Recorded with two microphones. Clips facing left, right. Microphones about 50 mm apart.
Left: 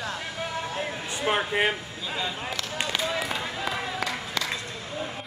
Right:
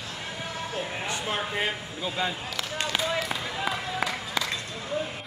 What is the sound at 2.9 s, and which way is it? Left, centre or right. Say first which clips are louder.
Basketball bounce: right 1 dB; centre.